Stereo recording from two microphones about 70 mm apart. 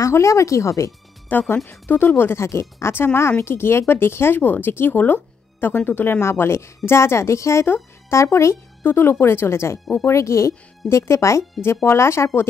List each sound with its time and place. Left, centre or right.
0.0 s speech: left
1.3 s speech: left
8.8 s speech: left